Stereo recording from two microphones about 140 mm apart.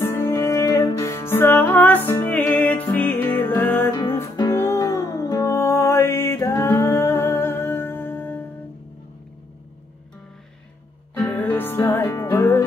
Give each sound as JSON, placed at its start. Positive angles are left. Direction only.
{"t": 0.0, "sound": "music", "side_deg": 20}
{"t": 11.1, "sound": "music", "side_deg": 10}